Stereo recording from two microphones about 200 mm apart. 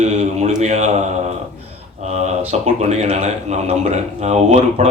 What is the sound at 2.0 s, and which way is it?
Speech, 35° right (ahead or behind).